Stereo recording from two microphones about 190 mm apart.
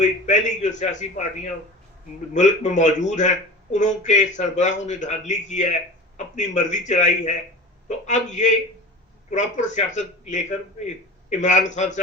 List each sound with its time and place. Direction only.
0.0 s speech: 40° left (ahead or behind)
2.3 s speech: 40° left (ahead or behind)